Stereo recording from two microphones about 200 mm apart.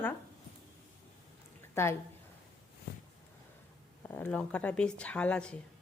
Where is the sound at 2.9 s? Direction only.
55° left (ahead or behind).